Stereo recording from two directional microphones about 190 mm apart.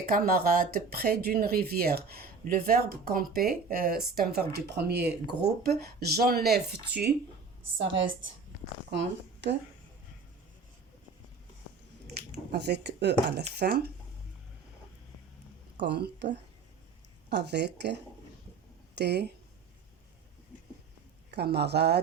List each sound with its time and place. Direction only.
0.1 s speech: 50° right (ahead or behind)
7.8 s a woman's voice: 75° right (ahead or behind)
8.9 s speech: 65° right (ahead or behind)
12.5 s speech: 60° right (ahead or behind)
15.8 s speech: 60° right (ahead or behind)
21.2 s speech: 60° right (ahead or behind)